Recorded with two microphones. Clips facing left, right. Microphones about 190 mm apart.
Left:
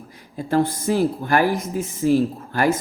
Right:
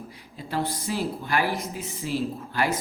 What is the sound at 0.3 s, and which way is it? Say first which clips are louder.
A man's voice: left 9 dB; 50° left (ahead or behind).